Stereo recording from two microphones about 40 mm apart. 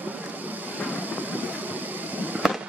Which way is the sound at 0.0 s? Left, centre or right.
Right.